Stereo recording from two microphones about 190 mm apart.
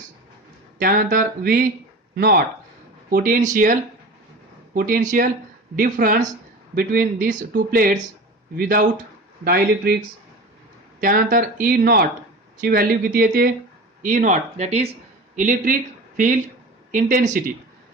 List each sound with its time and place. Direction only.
0.8 s speech: 50° right (ahead or behind)
11.0 s speech: 45° right (ahead or behind)